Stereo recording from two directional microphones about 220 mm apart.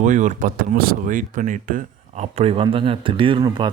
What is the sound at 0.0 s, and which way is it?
Speech, 35° right (ahead or behind).